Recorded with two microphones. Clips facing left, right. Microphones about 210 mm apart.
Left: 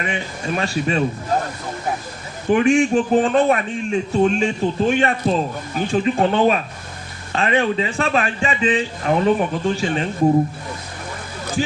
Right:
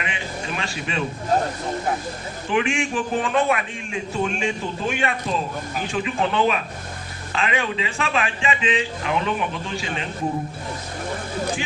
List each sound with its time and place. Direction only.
0.0 s a man's voice: 40° left (ahead or behind)
2.5 s a man's voice: 40° left (ahead or behind)